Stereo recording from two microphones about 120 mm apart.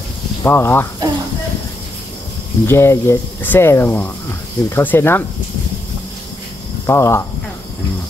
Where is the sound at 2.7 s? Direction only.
20° left (ahead or behind).